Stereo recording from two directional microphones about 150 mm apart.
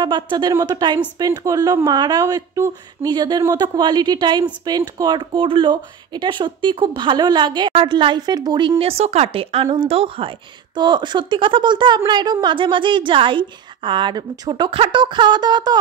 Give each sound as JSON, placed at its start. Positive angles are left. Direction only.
{"t": 0.0, "sound": "a woman's voice", "side_deg": -30}